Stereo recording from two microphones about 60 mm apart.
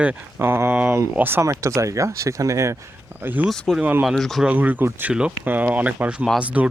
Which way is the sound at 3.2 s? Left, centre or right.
Right.